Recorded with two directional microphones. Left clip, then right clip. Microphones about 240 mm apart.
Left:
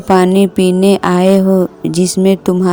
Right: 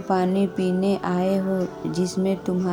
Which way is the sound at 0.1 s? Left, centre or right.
Left.